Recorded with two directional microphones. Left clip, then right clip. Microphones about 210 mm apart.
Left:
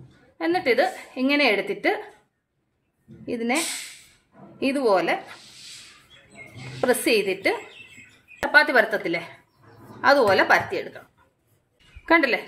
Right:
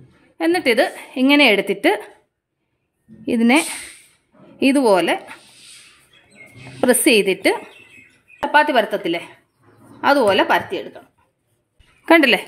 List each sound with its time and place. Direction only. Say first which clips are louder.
0.4 s a woman's voice: right 5 dB; 45° right (ahead or behind)
3.3 s a woman's voice: right 9 dB; 45° right (ahead or behind)
6.8 s speech: right 6 dB; 40° right (ahead or behind)
8.5 s speech: right 2 dB; 25° right (ahead or behind)
12.1 s a woman's voice: right 6 dB; 45° right (ahead or behind)